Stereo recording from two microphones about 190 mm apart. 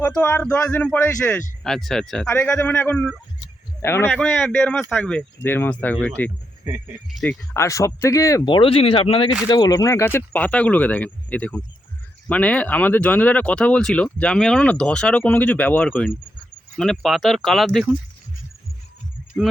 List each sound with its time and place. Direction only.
0.0 s speech: 10° left (ahead or behind)
7.5 s speech: 15° left (ahead or behind)